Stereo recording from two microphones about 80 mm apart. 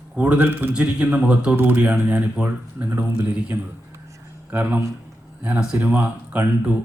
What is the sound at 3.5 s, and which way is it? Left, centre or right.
A man's voice, right.